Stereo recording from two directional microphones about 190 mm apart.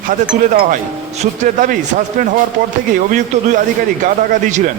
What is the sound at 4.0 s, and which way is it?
Speech, 40° right (ahead or behind).